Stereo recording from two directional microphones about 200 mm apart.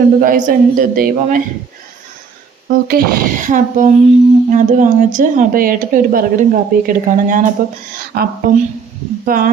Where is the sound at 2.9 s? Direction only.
45° right (ahead or behind).